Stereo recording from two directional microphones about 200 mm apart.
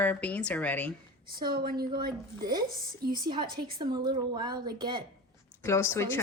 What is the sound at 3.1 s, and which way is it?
A woman's voice, 20° right (ahead or behind).